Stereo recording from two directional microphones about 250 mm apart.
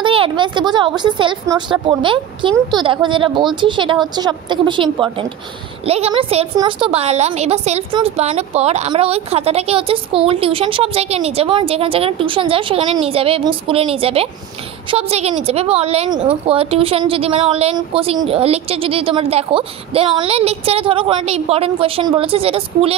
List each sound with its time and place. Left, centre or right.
0.0 s a woman's voice: centre
5.9 s a woman's voice: right